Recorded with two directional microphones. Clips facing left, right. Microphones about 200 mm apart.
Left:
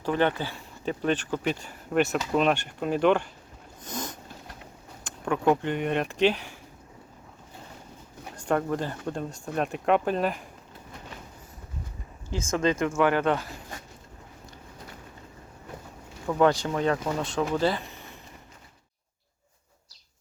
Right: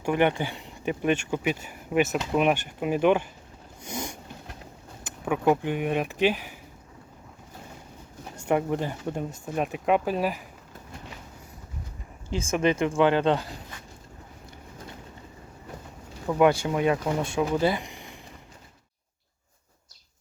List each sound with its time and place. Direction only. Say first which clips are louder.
0.0 s speech: right 2 dB; 15° right (ahead or behind)
3.8 s a sound: right 1 dB; 10° right (ahead or behind)
5.5 s speech: even; 5° right (ahead or behind)
8.4 s speech: right 1 dB; 10° right (ahead or behind)
12.5 s speech: right 1 dB; 15° right (ahead or behind)
12.7 s speech: right 2 dB; 25° right (ahead or behind)
16.3 s speech: right 1 dB; 10° right (ahead or behind)